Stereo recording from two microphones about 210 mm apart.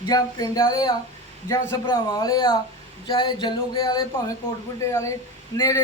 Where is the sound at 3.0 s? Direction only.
20° left (ahead or behind).